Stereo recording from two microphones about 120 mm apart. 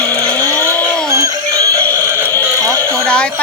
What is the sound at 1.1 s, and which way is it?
Music, 25° right (ahead or behind).